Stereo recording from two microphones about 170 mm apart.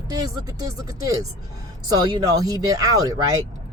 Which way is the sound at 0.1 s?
20° right (ahead or behind).